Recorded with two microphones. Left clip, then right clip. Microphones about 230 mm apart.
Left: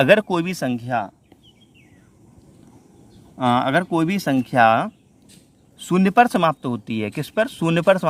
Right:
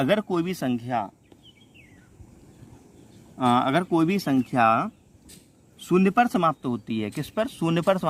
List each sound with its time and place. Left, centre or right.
0.0 s speech: left
3.3 s speech: centre